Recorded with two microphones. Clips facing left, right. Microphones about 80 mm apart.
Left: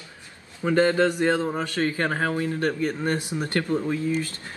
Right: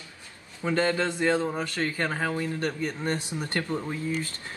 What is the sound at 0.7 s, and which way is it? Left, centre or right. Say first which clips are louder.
Speech: left 5 dB; left.